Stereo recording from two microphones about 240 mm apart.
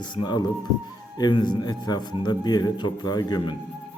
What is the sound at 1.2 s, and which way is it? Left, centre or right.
A man's voice, centre.